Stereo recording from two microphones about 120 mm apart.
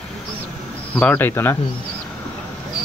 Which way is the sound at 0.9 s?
15° left (ahead or behind).